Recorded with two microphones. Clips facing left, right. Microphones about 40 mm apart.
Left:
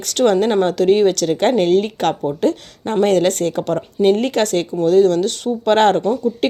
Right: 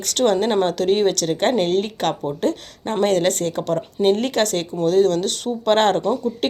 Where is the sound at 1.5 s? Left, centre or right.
Left.